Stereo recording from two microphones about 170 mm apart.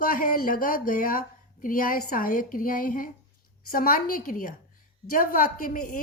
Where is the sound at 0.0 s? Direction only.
55° left (ahead or behind).